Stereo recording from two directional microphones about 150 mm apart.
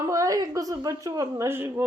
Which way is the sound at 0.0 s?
20° right (ahead or behind).